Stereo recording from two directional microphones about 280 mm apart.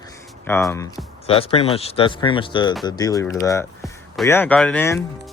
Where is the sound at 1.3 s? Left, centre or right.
Left.